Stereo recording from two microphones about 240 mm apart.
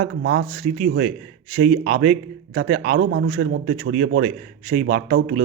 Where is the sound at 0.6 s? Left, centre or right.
Right.